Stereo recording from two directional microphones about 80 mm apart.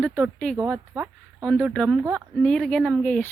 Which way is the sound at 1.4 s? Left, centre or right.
Centre.